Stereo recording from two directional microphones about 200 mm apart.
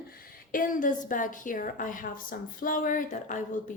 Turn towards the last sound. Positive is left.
turn(degrees=40)  # may be behind; listen again after turning